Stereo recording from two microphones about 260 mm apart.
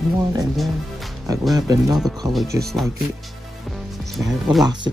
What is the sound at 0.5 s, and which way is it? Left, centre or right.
Speech, centre.